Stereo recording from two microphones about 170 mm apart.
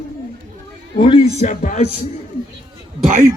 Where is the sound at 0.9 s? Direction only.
30° left (ahead or behind).